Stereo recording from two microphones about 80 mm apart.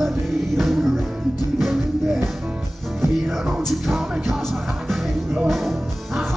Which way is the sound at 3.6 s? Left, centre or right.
Centre.